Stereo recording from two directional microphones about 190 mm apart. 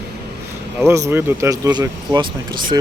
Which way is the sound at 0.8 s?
15° right (ahead or behind).